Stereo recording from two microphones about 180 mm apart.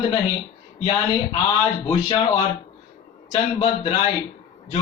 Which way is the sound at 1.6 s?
30° left (ahead or behind).